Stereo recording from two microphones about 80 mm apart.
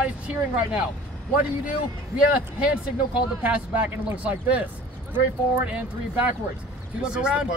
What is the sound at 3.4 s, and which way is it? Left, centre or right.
Speech, centre.